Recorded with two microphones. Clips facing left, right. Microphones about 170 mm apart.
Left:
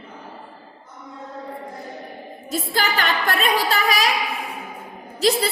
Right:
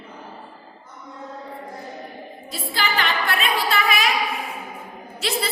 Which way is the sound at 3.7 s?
40° left (ahead or behind).